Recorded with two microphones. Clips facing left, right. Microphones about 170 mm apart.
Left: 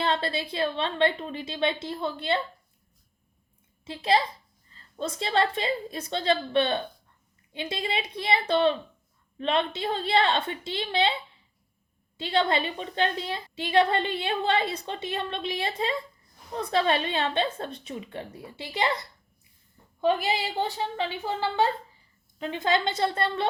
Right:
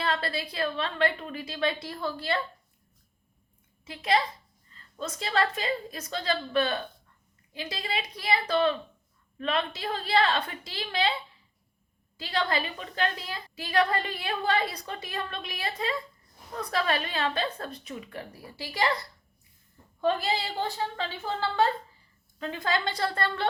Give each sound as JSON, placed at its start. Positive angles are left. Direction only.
{"t": 0.0, "sound": "a woman's voice", "side_deg": 25}
{"t": 3.8, "sound": "a woman's voice", "side_deg": 30}
{"t": 12.1, "sound": "a woman's voice", "side_deg": 25}
{"t": 20.0, "sound": "a woman's voice", "side_deg": 15}